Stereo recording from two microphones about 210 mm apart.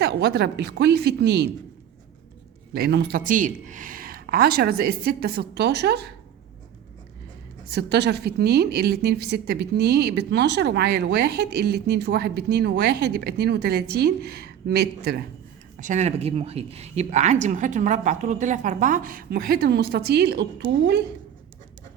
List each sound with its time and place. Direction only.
0.0 s a woman's voice: 50° right (ahead or behind)
2.7 s a woman's voice: 50° right (ahead or behind)
7.7 s a woman's voice: 50° right (ahead or behind)
15.8 s speech: 35° right (ahead or behind); by 20.9 s 55° right (ahead or behind)